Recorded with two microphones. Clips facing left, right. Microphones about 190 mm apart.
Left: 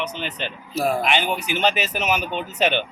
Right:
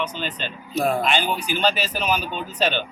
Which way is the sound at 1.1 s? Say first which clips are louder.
Left 1 dB; 20° left (ahead or behind).